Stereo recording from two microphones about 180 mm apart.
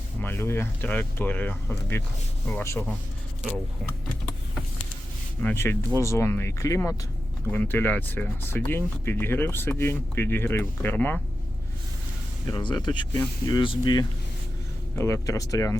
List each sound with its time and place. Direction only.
0.2 s speech: 10° left (ahead or behind)
5.4 s speech: 10° left (ahead or behind)
12.5 s speech: 25° left (ahead or behind)
14.9 s speech: 15° left (ahead or behind)